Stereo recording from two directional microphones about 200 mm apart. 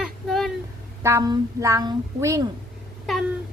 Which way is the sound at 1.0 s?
15° right (ahead or behind).